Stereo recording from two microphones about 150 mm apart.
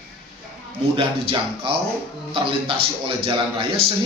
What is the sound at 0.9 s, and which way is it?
A man's voice, 35° right (ahead or behind).